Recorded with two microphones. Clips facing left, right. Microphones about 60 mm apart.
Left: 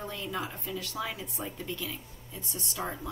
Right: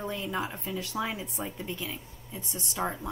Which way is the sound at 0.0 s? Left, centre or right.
Centre.